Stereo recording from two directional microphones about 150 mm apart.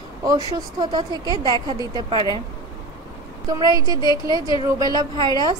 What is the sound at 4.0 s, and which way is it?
Speech, 30° left (ahead or behind).